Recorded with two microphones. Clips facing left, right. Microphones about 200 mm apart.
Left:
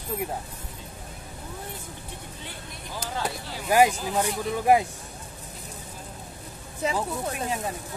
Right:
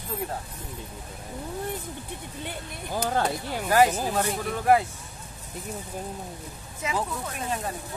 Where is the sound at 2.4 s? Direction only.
55° right (ahead or behind).